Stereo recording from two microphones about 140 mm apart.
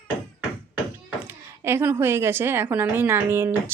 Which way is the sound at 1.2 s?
20° right (ahead or behind).